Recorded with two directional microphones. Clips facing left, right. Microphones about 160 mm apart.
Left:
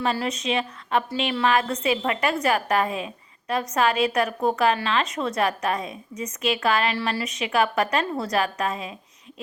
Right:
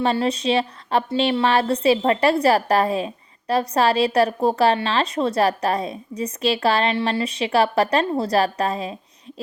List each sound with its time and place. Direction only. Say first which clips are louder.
0.0 s a woman's voice: right 5 dB; 30° right (ahead or behind)